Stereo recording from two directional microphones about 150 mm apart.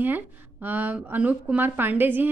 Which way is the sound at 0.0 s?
10° right (ahead or behind).